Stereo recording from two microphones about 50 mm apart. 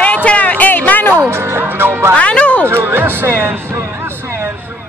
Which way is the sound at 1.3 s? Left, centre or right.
Right.